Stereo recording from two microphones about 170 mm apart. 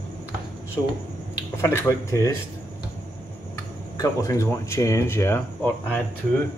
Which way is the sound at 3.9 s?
20° left (ahead or behind).